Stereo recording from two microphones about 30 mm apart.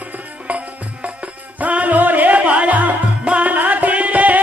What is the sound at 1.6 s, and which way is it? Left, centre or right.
Music, right.